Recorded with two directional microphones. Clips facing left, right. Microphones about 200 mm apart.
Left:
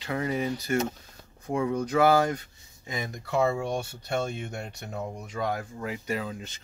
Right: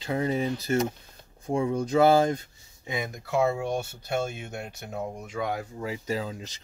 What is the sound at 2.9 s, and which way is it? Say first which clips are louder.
Speech: right 1 dB; 10° right (ahead or behind).